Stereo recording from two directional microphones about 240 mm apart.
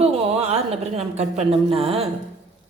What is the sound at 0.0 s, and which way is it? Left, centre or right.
A woman's voice, right.